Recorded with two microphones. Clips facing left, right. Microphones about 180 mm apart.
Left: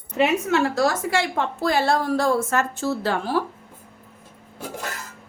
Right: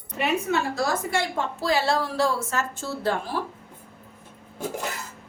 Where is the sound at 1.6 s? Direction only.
55° left (ahead or behind); by 3.3 s 80° left.